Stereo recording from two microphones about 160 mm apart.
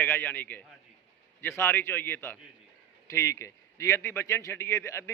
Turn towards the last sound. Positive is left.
turn(degrees=15)  # may be behind; listen again after turning